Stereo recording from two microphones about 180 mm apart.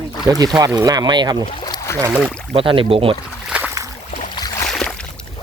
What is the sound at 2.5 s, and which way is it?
Speech, 30° right (ahead or behind).